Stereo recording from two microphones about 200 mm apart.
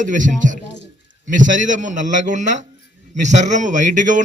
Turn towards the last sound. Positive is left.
turn(degrees=-40)  # may be behind; listen again after turning